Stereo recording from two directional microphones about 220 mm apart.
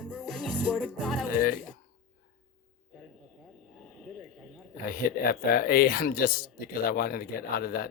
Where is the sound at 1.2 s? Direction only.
40° left (ahead or behind).